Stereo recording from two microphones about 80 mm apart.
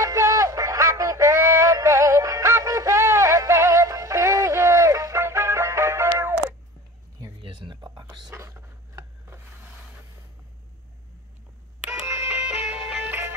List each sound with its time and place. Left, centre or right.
0.0 s synthetic singing: right
6.0 s music: right
7.4 s a sound: right
8.4 s a sound: right
11.8 s doorbell: centre
12.1 s music: right
12.4 s music: centre